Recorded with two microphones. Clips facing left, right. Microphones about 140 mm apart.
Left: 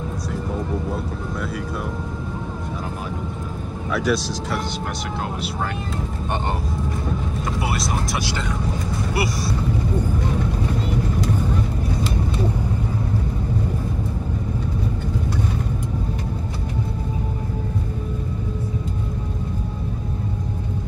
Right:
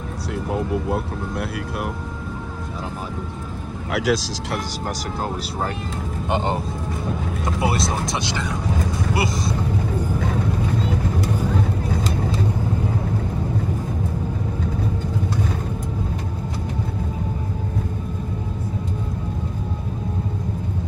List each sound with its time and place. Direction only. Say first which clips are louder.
3.9 s speech: even; 90° right
8.1 s speech: even; 20° right (ahead or behind)